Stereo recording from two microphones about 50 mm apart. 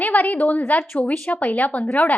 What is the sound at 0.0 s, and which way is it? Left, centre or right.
A woman's voice, left.